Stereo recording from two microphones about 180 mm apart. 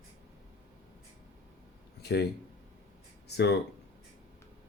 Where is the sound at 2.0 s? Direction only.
65° left (ahead or behind).